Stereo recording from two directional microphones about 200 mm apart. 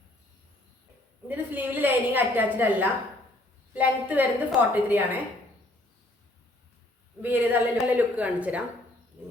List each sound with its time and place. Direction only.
1.5 s a woman's voice: 10° right (ahead or behind)
7.2 s a woman's voice: 10° right (ahead or behind)